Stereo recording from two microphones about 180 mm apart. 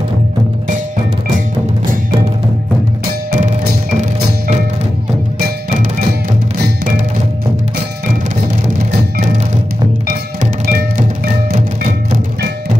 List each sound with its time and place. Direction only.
3.1 s music: 55° right (ahead or behind)
8.6 s music: 45° right (ahead or behind)